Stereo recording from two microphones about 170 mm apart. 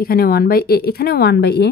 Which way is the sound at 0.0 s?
60° left (ahead or behind).